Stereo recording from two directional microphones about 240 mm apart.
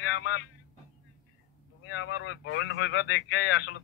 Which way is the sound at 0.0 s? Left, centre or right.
Left.